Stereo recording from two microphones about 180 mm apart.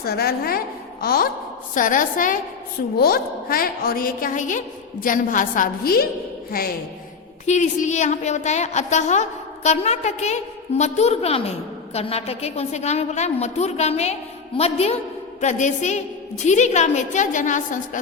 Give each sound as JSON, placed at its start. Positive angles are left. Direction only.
{"t": 0.0, "sound": "a woman's voice", "side_deg": 60}
{"t": 7.4, "sound": "a woman's voice", "side_deg": 40}